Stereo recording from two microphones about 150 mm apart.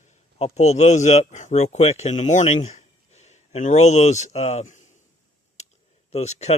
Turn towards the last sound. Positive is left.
turn(degrees=45)  # may be behind; listen again after turning